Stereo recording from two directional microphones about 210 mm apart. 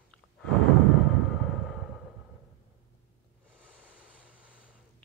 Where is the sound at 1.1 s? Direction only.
Centre (ahead or behind).